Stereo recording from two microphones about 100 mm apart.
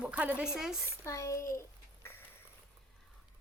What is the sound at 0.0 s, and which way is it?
Speech, 15° right (ahead or behind).